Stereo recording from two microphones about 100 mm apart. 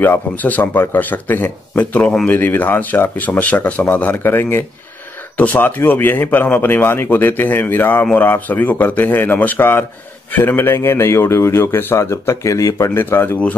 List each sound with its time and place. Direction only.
0.0 s speech: 20° left (ahead or behind)